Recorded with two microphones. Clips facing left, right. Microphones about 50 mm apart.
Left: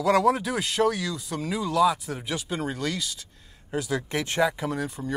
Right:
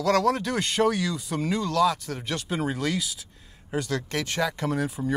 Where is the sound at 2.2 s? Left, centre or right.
Centre.